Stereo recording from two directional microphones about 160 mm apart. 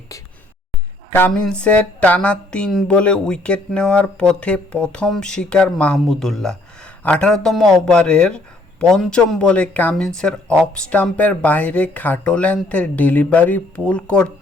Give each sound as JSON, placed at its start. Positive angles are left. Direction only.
{"t": 1.1, "sound": "speech", "side_deg": 10}